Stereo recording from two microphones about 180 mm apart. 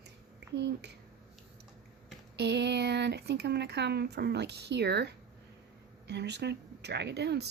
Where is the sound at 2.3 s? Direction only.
70° right (ahead or behind).